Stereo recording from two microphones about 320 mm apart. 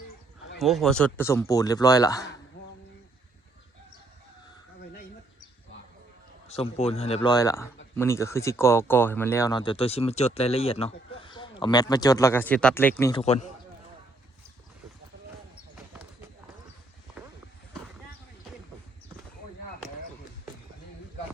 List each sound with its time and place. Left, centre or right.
0.6 s speech: centre
6.5 s speech: centre